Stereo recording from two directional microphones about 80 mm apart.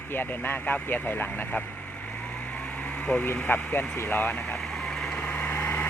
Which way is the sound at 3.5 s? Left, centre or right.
Left.